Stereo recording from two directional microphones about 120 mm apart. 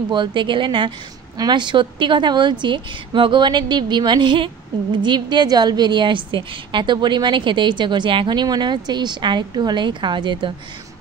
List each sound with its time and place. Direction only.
0.1 s a woman's voice: 40° right (ahead or behind)